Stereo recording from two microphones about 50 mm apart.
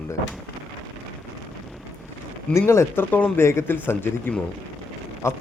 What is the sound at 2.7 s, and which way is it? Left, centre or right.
Speech, left.